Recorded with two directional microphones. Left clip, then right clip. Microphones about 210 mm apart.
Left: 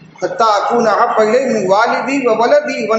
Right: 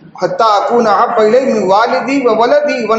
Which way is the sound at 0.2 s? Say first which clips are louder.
Right 2 dB; 30° right (ahead or behind).